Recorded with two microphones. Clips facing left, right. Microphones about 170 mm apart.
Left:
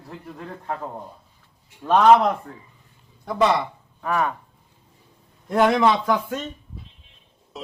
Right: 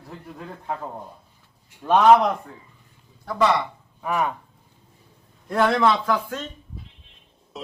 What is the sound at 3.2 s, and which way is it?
Speech, 20° left (ahead or behind).